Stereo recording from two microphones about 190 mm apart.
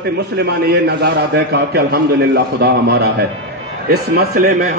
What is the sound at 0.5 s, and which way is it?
A man's voice, 60° right (ahead or behind).